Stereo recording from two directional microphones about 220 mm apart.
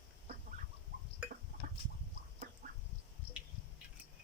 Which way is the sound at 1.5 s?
40° right (ahead or behind).